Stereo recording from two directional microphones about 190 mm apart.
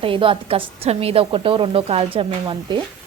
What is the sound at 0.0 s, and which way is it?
A woman's voice, 30° right (ahead or behind).